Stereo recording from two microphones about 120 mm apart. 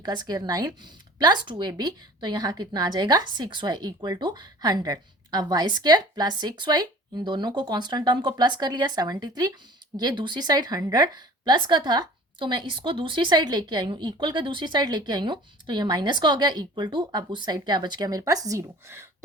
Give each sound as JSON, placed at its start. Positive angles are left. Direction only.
{"t": 0.0, "sound": "a woman's voice", "side_deg": -35}